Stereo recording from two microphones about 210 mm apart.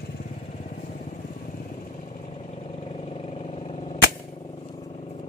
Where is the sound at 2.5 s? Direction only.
30° left (ahead or behind).